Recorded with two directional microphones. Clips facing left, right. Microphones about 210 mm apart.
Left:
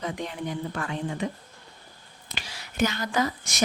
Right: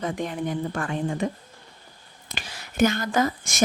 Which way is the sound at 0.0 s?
50° right (ahead or behind).